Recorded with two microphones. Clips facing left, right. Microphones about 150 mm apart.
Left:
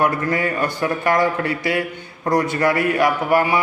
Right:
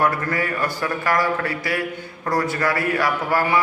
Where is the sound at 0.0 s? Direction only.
20° left (ahead or behind).